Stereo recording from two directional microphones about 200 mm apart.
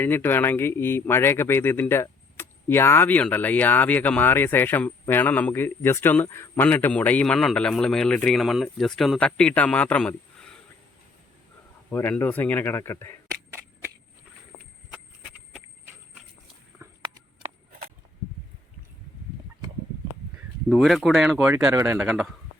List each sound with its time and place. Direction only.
0.0 s speech: 10° left (ahead or behind)
11.9 s speech: 10° left (ahead or behind)
16.8 s a sound: 15° right (ahead or behind)
20.7 s speech: centre (ahead or behind)